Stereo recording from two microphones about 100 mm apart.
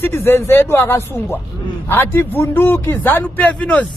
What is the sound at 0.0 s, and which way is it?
A man's voice, 25° left (ahead or behind).